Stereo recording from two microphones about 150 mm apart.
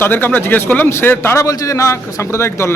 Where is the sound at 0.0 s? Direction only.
10° left (ahead or behind).